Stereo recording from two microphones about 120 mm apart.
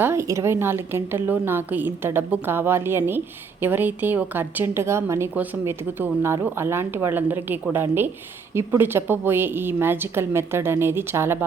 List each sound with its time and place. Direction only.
0.0 s a woman's voice: 20° right (ahead or behind)